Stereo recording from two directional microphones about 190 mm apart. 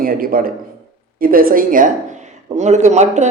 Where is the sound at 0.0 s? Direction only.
50° right (ahead or behind).